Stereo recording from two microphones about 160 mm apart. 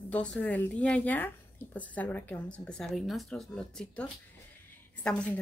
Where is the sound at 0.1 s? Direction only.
5° left (ahead or behind).